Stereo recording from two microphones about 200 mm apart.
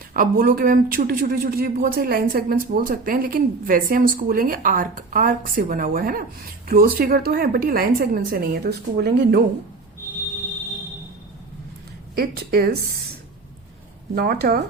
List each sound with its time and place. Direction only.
0.1 s speech: 45° right (ahead or behind)
12.1 s speech: 50° right (ahead or behind)
14.2 s speech: 50° right (ahead or behind)